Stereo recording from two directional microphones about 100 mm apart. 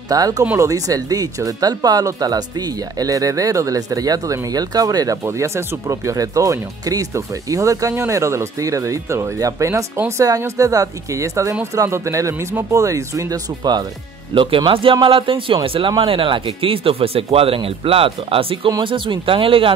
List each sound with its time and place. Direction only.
0.1 s speech: 35° right (ahead or behind)
14.3 s speech: 60° right (ahead or behind)